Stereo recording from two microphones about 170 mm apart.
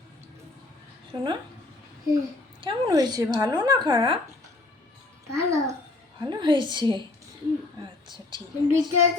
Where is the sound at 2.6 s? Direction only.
25° right (ahead or behind).